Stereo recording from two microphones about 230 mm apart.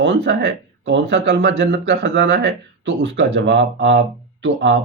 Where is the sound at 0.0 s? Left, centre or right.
Right.